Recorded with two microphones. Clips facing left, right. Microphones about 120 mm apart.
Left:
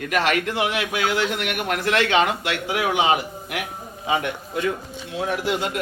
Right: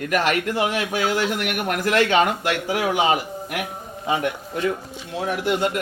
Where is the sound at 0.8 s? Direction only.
40° right (ahead or behind).